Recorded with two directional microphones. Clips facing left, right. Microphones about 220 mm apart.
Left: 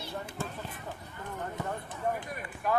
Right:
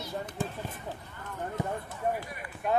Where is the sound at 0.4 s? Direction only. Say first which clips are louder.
Right 4 dB; 15° right (ahead or behind).